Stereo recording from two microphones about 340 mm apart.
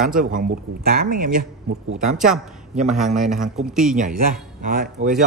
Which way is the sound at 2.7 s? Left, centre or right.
Right.